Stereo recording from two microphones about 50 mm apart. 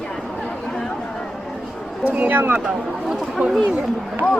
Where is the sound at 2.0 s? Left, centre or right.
Right.